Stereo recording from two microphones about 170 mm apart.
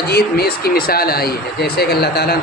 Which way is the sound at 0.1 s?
65° left (ahead or behind).